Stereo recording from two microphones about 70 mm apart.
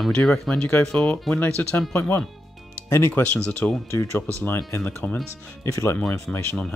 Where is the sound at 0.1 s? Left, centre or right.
Centre.